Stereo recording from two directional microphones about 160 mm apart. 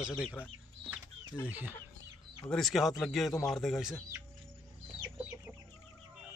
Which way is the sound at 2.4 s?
Centre (ahead or behind).